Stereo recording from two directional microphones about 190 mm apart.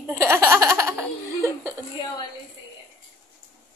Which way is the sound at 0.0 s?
15° right (ahead or behind).